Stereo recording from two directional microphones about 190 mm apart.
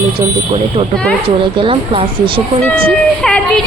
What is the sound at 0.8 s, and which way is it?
Speech, 30° right (ahead or behind).